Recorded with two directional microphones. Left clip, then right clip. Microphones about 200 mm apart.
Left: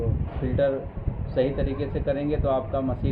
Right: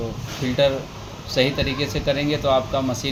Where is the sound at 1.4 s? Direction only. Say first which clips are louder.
Right 4 dB; 20° right (ahead or behind).